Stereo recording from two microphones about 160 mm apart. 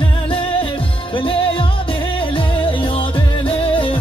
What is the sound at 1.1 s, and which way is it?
Music, 35° left (ahead or behind).